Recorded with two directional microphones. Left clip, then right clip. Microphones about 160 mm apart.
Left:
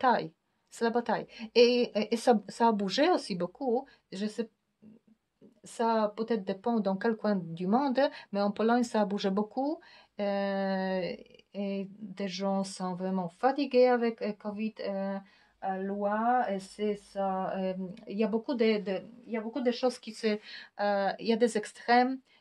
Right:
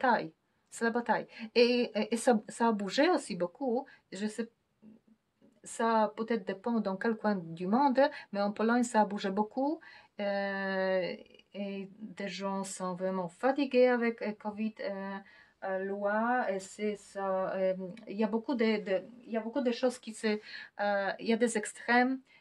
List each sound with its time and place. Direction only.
0.0 s a woman's voice: 30° left (ahead or behind)
5.7 s speech: 25° left (ahead or behind)